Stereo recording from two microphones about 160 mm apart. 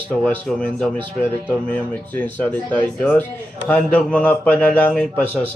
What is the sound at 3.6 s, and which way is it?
Speech, 10° left (ahead or behind).